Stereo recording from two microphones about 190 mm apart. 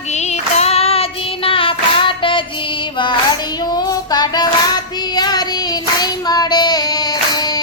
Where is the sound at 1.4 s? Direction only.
30° left (ahead or behind).